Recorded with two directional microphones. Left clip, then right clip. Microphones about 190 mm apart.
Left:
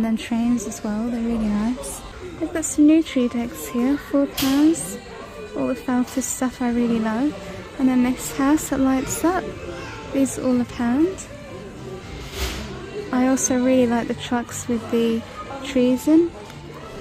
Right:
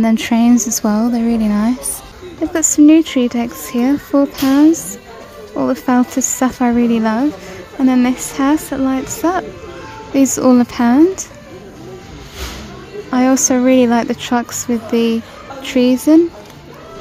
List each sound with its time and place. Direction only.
0.0 s a woman's voice: 25° right (ahead or behind)
13.1 s a woman's voice: 15° right (ahead or behind)